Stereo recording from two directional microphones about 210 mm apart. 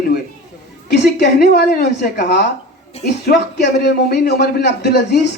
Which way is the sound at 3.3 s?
35° left (ahead or behind).